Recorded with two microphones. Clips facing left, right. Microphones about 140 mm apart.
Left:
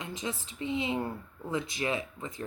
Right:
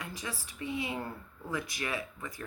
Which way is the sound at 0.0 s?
20° left (ahead or behind).